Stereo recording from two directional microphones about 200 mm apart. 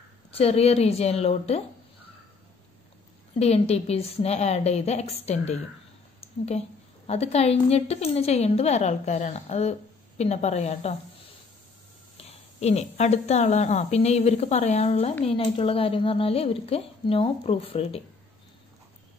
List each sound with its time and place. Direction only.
0.3 s a woman's voice: 30° left (ahead or behind)
3.3 s a woman's voice: 30° left (ahead or behind)
12.2 s a woman's voice: 30° left (ahead or behind)